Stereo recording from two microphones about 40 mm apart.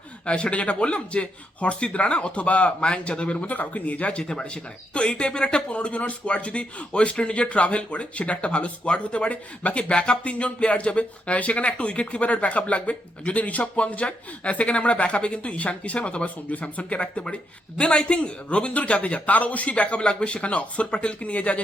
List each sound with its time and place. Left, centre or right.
0.3 s speech: left
4.2 s speech: centre; by 21.6 s left